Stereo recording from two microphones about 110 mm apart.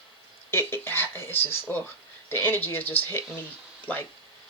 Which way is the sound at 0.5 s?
20° left (ahead or behind).